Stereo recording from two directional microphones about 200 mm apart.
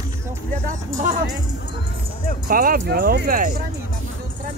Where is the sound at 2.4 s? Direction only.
45° right (ahead or behind).